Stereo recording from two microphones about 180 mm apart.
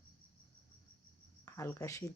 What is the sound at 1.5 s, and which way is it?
Speech, 15° left (ahead or behind).